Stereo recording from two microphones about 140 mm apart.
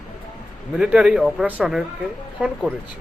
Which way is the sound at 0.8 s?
10° right (ahead or behind).